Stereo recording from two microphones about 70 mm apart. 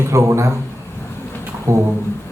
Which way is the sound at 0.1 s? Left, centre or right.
Right.